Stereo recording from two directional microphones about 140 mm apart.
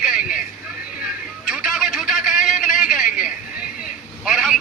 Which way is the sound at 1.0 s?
5° right (ahead or behind).